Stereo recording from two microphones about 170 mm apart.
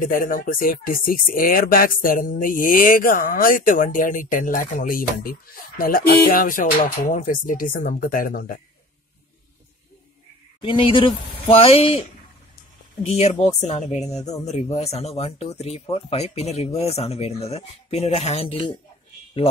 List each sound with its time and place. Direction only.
0.0 s speech: 55° left (ahead or behind)
10.6 s speech: 30° left (ahead or behind)
13.0 s speech: 35° left (ahead or behind)